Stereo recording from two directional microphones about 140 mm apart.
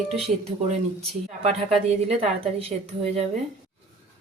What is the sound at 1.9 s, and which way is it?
Speech, 45° right (ahead or behind).